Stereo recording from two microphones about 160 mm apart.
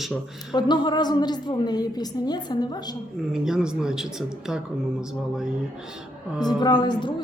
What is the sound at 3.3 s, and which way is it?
Speech, 5° right (ahead or behind).